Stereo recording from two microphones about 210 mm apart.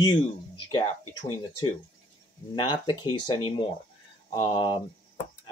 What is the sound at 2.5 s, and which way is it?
Speech, 20° left (ahead or behind).